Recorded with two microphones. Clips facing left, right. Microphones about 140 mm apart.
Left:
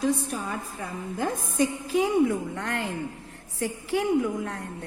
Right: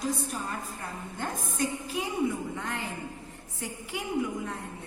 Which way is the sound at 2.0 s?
80° left.